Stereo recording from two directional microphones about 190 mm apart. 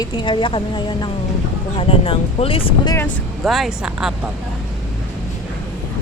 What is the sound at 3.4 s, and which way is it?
Speech, centre (ahead or behind).